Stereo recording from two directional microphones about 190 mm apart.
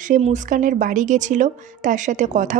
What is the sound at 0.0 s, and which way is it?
Speech, 40° right (ahead or behind).